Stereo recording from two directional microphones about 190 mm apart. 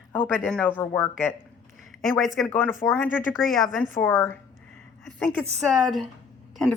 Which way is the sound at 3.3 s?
Centre (ahead or behind).